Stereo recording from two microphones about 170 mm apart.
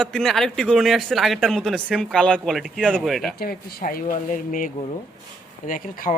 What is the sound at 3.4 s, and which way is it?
Speech, 65° left (ahead or behind).